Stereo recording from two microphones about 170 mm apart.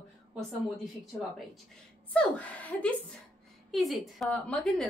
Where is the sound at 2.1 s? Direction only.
5° left (ahead or behind).